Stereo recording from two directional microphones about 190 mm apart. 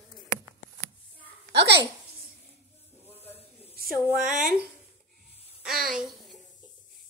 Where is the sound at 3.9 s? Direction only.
5° right (ahead or behind).